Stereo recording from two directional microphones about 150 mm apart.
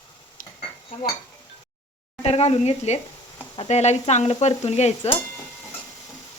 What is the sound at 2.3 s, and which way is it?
Speech, 45° left (ahead or behind).